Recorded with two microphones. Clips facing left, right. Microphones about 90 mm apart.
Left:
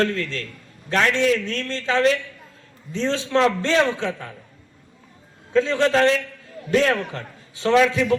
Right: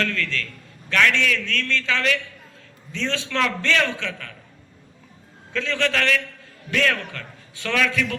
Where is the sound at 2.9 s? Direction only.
20° left (ahead or behind).